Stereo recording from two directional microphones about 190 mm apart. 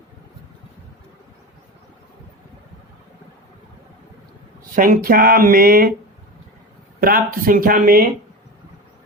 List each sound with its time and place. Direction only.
4.7 s speech: 45° right (ahead or behind)
7.0 s speech: 50° right (ahead or behind)